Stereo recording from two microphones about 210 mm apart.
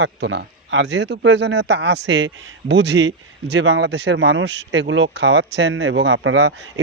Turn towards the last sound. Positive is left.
turn(degrees=-65)  # may be behind; listen again after turning